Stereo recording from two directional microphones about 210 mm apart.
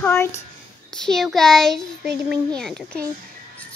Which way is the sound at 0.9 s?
Centre (ahead or behind).